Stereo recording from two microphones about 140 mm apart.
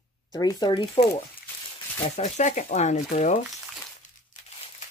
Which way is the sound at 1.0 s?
40° left (ahead or behind).